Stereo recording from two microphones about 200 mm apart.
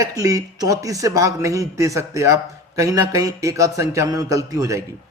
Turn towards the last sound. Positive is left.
turn(degrees=-15)  # may be behind; listen again after turning